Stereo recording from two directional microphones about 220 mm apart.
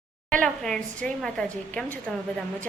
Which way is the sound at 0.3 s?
5° left (ahead or behind).